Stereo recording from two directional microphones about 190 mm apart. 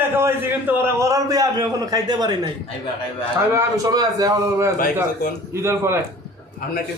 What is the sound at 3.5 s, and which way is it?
A man's voice, 15° right (ahead or behind).